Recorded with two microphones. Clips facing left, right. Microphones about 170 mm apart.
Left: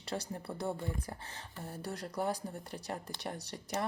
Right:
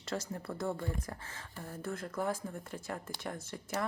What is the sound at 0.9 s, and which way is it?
Speech, 30° left (ahead or behind).